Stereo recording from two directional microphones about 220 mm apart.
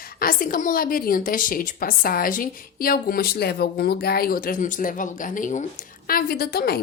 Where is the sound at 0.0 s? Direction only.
40° left (ahead or behind).